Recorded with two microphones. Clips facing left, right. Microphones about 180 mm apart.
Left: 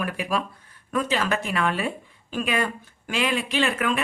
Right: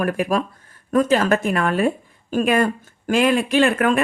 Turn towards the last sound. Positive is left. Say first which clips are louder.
# right 7 dB
turn(degrees=-50)  # may be behind; listen again after turning